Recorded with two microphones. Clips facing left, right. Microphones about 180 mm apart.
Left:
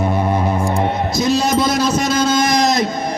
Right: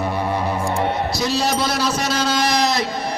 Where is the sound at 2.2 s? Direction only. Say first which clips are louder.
Left 5 dB; 45° left (ahead or behind).